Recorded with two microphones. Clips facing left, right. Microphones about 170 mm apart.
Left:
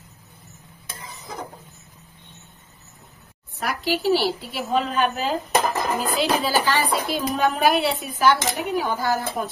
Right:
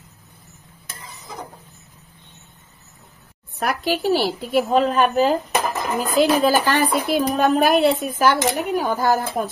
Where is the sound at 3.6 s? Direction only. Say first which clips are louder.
Right 3 dB; 55° right (ahead or behind).